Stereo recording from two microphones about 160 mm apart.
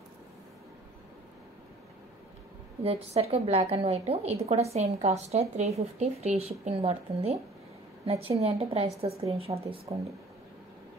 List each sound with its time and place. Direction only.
2.8 s a woman's voice: 40° right (ahead or behind)